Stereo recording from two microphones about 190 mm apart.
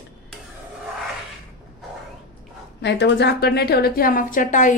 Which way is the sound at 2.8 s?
65° left (ahead or behind).